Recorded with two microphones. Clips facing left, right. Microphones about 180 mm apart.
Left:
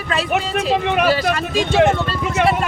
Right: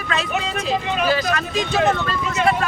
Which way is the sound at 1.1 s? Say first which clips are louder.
Left 3 dB; 30° left (ahead or behind).